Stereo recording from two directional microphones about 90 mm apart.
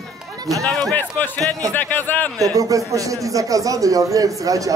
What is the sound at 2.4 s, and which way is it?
Speech, 40° right (ahead or behind).